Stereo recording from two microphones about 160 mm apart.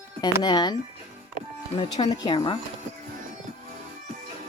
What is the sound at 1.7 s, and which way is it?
Speech, 30° left (ahead or behind).